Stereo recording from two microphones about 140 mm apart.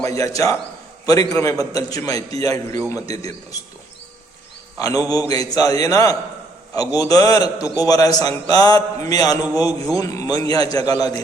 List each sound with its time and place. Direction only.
0.0 s a man's voice: 25° left (ahead or behind)
4.8 s a man's voice: 25° left (ahead or behind)